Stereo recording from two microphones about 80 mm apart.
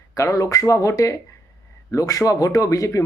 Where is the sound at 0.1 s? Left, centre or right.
Left.